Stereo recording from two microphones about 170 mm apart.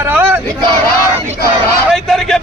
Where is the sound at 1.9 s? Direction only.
Centre (ahead or behind).